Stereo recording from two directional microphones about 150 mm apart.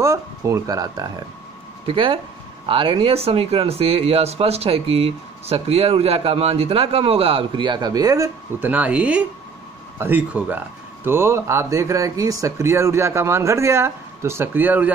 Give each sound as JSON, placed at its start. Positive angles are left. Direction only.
{"t": 0.0, "sound": "speech", "side_deg": -20}
{"t": 1.9, "sound": "speech", "side_deg": -35}
{"t": 8.5, "sound": "speech", "side_deg": -10}